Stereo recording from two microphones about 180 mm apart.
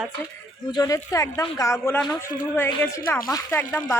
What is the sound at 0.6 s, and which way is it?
A woman's voice, 20° left (ahead or behind).